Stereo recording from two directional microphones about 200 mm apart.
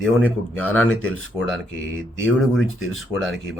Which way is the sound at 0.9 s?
90° left.